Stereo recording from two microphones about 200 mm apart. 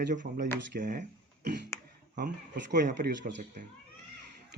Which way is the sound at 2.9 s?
55° right (ahead or behind).